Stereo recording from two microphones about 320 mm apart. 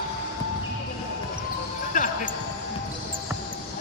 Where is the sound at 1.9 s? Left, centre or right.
Left.